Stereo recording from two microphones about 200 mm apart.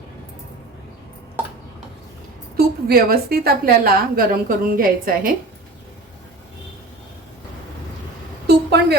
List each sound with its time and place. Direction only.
2.6 s a woman's voice: 50° right (ahead or behind)
8.4 s vehicle: 55° right (ahead or behind)